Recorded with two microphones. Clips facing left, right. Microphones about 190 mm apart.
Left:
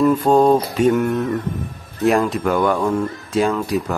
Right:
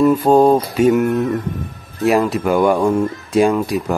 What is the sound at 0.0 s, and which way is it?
A man's voice, 10° right (ahead or behind).